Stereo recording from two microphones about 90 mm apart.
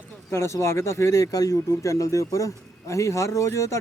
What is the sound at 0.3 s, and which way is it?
Speech, 30° left (ahead or behind).